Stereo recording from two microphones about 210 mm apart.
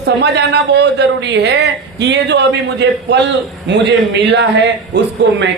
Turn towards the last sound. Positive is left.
turn(degrees=-55)  # may be behind; listen again after turning